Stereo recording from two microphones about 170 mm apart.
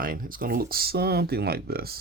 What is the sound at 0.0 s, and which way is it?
Speech, 55° right (ahead or behind).